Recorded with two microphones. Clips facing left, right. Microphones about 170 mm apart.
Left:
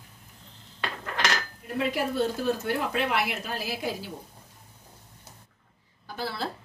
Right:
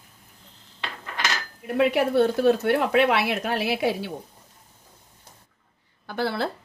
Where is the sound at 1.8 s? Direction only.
65° right (ahead or behind).